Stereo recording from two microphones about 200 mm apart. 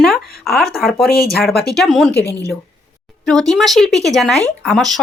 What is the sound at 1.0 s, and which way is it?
Speech, 50° left (ahead or behind).